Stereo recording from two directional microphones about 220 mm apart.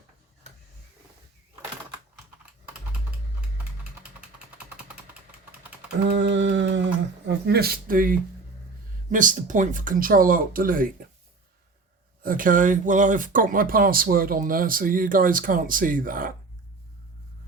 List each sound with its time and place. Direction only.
6.1 s a sound: 55° right (ahead or behind); by 8.2 s 40° right (ahead or behind)
9.0 s speech: 35° right (ahead or behind)
12.2 s speech: 40° right (ahead or behind)